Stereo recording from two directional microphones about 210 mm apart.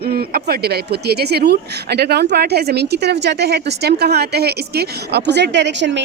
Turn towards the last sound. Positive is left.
turn(degrees=-55)  # may be behind; listen again after turning